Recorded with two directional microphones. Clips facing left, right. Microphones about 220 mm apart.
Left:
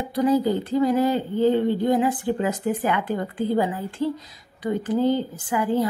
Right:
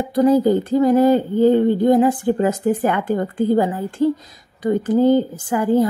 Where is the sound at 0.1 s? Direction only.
45° right (ahead or behind).